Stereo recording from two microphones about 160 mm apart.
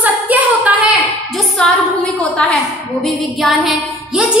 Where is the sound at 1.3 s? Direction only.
5° left (ahead or behind).